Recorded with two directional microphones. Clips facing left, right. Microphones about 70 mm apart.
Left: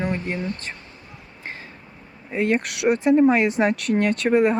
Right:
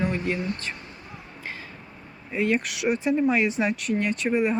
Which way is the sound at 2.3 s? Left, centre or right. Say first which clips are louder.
Left 3 dB; left.